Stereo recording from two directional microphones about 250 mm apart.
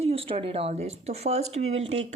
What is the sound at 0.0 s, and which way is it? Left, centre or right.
Speech, right.